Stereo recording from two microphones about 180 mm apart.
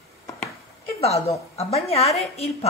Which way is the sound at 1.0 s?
35° left (ahead or behind).